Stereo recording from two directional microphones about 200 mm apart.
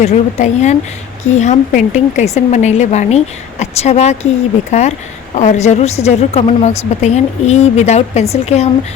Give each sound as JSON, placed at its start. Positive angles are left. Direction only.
{"t": 0.0, "sound": "a woman's voice", "side_deg": 35}